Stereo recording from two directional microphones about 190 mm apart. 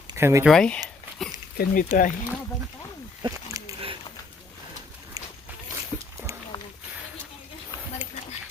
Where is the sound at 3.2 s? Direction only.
25° right (ahead or behind).